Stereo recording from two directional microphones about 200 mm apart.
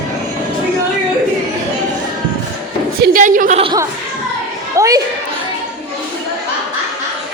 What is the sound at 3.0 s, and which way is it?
Speech, 40° right (ahead or behind).